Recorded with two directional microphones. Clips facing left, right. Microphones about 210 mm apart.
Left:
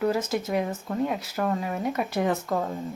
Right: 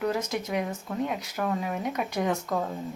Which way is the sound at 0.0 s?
5° left (ahead or behind).